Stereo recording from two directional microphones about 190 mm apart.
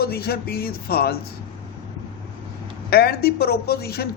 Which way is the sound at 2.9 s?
55° left (ahead or behind).